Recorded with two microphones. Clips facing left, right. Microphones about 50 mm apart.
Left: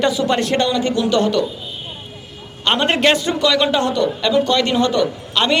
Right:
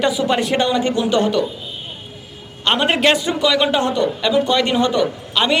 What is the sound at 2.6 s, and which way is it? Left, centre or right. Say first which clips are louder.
A man's voice: even; centre.